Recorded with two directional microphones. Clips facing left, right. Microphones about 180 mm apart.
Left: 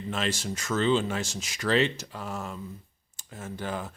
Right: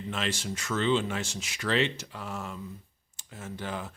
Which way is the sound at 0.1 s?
40° left (ahead or behind).